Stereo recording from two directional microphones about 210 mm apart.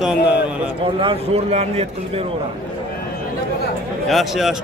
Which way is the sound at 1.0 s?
25° right (ahead or behind).